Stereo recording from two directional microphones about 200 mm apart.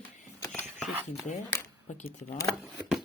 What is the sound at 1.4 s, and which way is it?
Speech, 15° left (ahead or behind).